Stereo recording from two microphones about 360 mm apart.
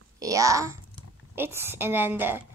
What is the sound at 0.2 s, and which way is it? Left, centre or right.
A woman's voice, centre.